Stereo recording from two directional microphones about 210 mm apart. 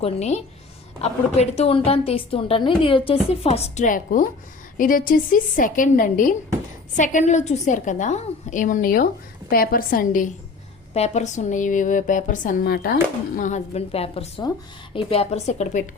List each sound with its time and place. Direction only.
0.0 s a woman's voice: 30° left (ahead or behind)